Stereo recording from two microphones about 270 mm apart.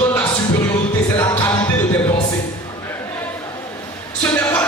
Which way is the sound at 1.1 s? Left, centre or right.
Centre.